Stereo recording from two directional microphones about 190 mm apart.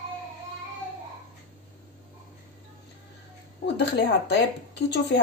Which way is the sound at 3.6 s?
65° left (ahead or behind).